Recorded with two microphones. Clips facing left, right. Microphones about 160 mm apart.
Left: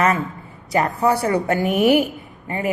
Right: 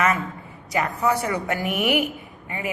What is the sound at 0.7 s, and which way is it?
Speech, 35° left (ahead or behind).